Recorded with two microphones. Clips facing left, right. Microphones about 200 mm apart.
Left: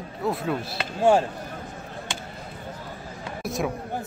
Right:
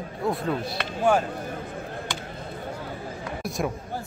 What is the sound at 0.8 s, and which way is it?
Speech, 30° left (ahead or behind).